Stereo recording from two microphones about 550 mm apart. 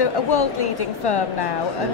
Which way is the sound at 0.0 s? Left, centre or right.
Left.